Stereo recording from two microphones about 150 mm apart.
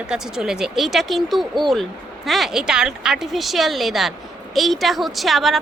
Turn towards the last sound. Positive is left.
turn(degrees=0)  # may be behind; listen again after turning